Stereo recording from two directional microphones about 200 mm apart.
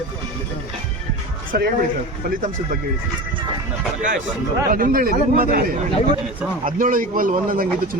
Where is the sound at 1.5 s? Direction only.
50° right (ahead or behind).